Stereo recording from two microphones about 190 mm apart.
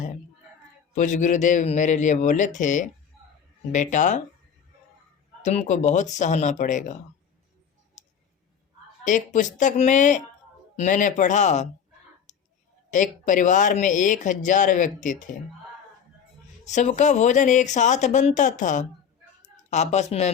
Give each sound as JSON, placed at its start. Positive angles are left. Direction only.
{"t": 0.9, "sound": "speech", "side_deg": 40}
{"t": 5.4, "sound": "speech", "side_deg": 40}
{"t": 8.0, "sound": "clicking", "side_deg": 40}
{"t": 9.0, "sound": "speech", "side_deg": 40}
{"t": 12.3, "sound": "clicking", "side_deg": 40}
{"t": 12.9, "sound": "speech", "side_deg": 40}
{"t": 16.6, "sound": "speech", "side_deg": 40}
{"t": 19.4, "sound": "a sound", "side_deg": 40}